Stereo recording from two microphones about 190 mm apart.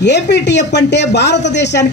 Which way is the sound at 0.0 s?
65° left (ahead or behind).